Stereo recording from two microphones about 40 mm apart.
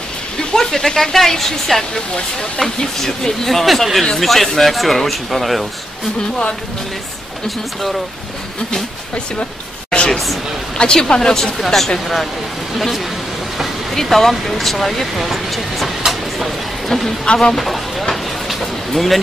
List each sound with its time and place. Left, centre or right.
0.6 s speech: centre
7.4 s speech: centre
9.8 s a sound: left
10.1 s speech: centre
10.8 s speech: centre
14.1 s speech: centre
16.0 s a sound: centre
17.2 s speech: centre
17.6 s a sound: centre